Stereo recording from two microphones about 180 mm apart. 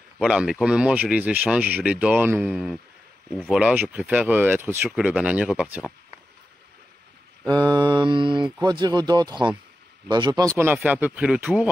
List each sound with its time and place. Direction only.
0.2 s speech: 5° right (ahead or behind)
3.5 s speech: 10° right (ahead or behind)
7.4 s mantra: 25° right (ahead or behind)
10.6 s speech: 10° right (ahead or behind)